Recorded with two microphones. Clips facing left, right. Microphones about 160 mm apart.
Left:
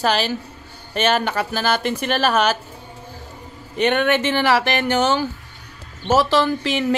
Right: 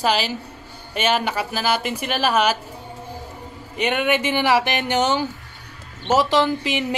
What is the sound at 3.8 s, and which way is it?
Speech, 10° right (ahead or behind).